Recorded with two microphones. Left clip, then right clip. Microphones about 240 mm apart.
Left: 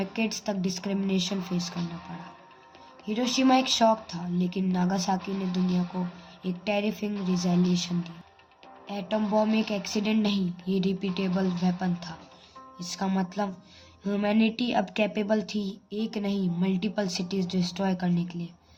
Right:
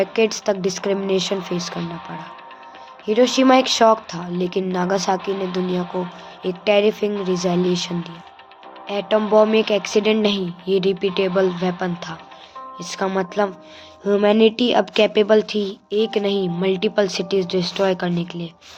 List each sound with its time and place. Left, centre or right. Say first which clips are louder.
0.0 s a woman's voice: right 13 dB; centre
3.1 s a woman's voice: right 10 dB; centre
6.4 s a woman's voice: right 13 dB; centre